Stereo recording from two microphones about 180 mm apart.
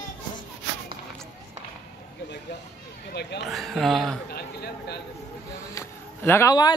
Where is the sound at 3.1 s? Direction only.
70° left (ahead or behind).